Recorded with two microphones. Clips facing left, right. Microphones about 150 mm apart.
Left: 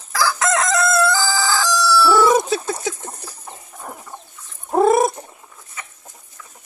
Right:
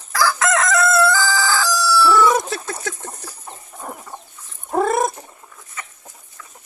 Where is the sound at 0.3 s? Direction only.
15° left (ahead or behind).